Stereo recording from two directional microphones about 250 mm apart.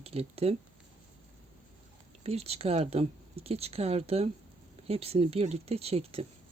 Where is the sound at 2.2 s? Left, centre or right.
Right.